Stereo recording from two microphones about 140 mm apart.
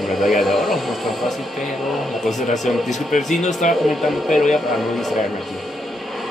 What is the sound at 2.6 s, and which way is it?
Speech, centre (ahead or behind).